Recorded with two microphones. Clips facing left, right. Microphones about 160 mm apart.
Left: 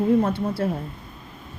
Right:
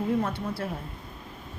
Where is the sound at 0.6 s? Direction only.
30° left (ahead or behind).